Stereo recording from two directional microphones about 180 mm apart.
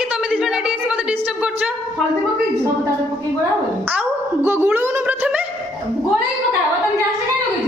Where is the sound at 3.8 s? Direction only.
10° right (ahead or behind).